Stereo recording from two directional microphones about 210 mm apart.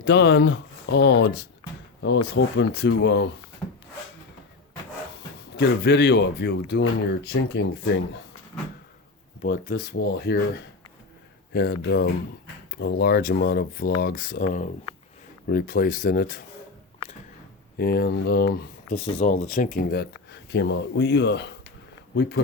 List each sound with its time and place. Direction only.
0.0 s speech: 55° left (ahead or behind)
5.5 s speech: 55° left (ahead or behind)
9.4 s speech: 45° left (ahead or behind)
17.7 s speech: 50° left (ahead or behind)
18.9 s speech: 30° left (ahead or behind); by 22.4 s 55° left (ahead or behind)